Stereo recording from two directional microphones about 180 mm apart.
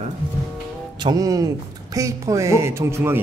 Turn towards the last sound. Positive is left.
turn(degrees=-15)  # may be behind; listen again after turning